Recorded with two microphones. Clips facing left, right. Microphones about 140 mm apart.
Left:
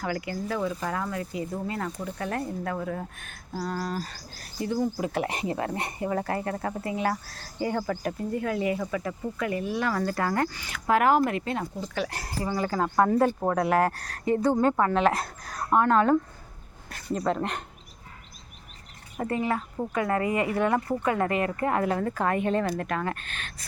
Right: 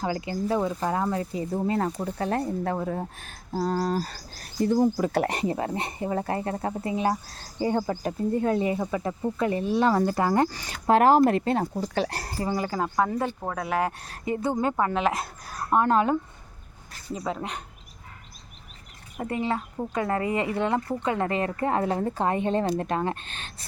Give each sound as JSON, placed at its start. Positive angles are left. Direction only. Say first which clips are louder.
{"t": 0.0, "sound": "speech", "louder": "right 3 dB", "side_deg": -25}
{"t": 10.5, "sound": "speech", "louder": "right 3 dB", "side_deg": -35}
{"t": 12.5, "sound": "speech", "louder": "left 1 dB", "side_deg": -20}
{"t": 13.0, "sound": "speech", "louder": "left 6 dB", "side_deg": 0}
{"t": 13.9, "sound": "speech", "louder": "left 3 dB", "side_deg": -25}
{"t": 14.6, "sound": "speech", "louder": "left 2 dB", "side_deg": -15}
{"t": 14.9, "sound": "speech", "louder": "left 2 dB", "side_deg": -5}
{"t": 15.4, "sound": "speech", "louder": "even", "side_deg": -25}
{"t": 17.2, "sound": "speech", "louder": "left 4 dB", "side_deg": 0}
{"t": 19.1, "sound": "speech", "louder": "left 2 dB", "side_deg": -10}
{"t": 19.4, "sound": "speech", "louder": "right 2 dB", "side_deg": -25}